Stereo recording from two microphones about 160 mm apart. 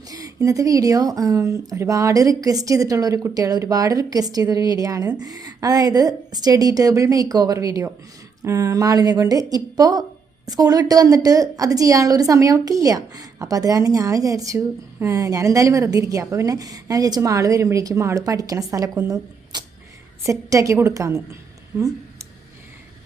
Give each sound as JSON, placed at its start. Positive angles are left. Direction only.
{"t": 0.1, "sound": "a woman's voice", "side_deg": -20}